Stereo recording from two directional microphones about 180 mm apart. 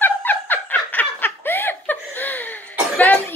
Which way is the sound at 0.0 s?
10° left (ahead or behind).